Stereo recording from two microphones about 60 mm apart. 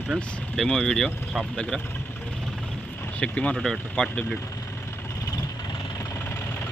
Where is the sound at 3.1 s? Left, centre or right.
Left.